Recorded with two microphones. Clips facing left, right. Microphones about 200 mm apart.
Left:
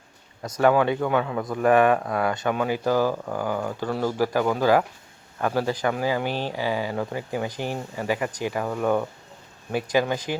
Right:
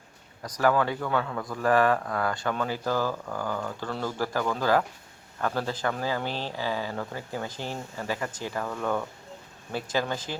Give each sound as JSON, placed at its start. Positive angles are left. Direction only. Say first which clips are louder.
{"t": 0.4, "sound": "speech", "louder": "left 5 dB", "side_deg": 25}